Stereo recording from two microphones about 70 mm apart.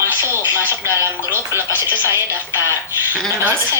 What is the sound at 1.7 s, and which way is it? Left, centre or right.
Speech, right.